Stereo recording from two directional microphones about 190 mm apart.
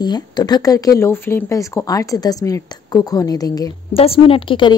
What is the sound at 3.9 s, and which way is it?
Speech, 30° left (ahead or behind).